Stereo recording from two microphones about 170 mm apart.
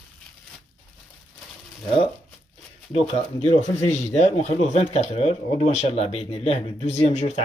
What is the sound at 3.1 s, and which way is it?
Speech, 45° left (ahead or behind).